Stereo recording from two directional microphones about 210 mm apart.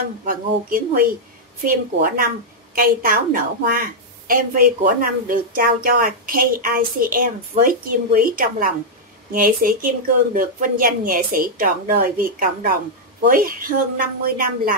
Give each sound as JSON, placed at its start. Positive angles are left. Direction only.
{"t": 0.2, "sound": "a woman's voice", "side_deg": -40}